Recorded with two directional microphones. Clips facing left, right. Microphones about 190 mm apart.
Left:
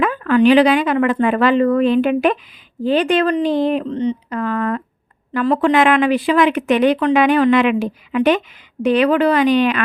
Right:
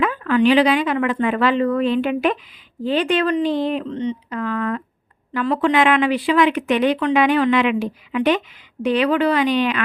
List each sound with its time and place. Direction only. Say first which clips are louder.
0.0 s speech: left 3 dB; 50° left (ahead or behind)